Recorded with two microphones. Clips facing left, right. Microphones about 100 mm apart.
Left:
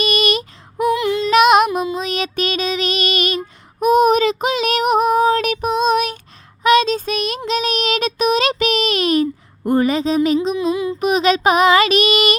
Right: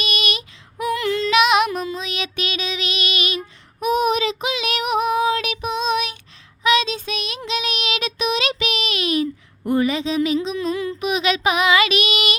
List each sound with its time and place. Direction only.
0.0 s female singing: 40° left (ahead or behind)
0.9 s female singing: 20° left (ahead or behind)
1.3 s female singing: 40° left (ahead or behind)
1.7 s child singing: 15° left (ahead or behind)
2.0 s child singing: 40° left (ahead or behind)
10.6 s a sound: 15° left (ahead or behind)
11.0 s child singing: 40° left (ahead or behind)